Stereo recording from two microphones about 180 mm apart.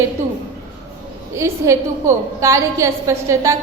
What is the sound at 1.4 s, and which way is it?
A woman's voice, 15° right (ahead or behind).